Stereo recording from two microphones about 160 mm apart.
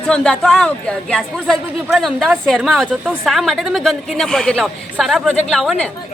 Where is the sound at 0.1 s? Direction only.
5° left (ahead or behind).